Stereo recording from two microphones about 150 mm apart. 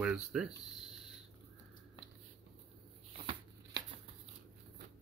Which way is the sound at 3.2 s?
35° right (ahead or behind).